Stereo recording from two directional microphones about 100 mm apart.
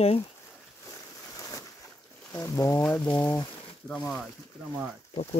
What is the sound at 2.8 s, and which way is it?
Speech, 15° left (ahead or behind).